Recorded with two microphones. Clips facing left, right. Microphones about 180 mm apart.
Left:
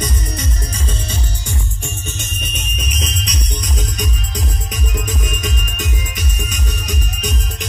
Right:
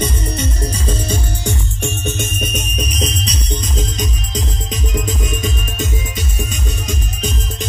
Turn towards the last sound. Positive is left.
turn(degrees=-25)  # may be behind; listen again after turning